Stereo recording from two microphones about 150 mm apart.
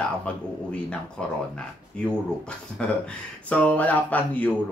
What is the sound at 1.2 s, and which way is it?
Speech, 5° left (ahead or behind).